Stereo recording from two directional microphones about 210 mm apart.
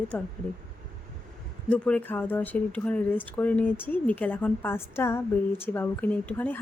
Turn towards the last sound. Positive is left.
turn(degrees=10)  # may be behind; listen again after turning